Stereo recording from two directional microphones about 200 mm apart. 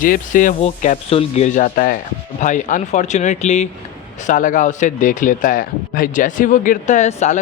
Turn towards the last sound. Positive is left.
turn(degrees=35)  # may be behind; listen again after turning